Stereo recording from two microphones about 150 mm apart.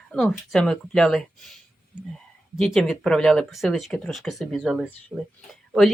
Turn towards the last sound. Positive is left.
turn(degrees=0)  # may be behind; listen again after turning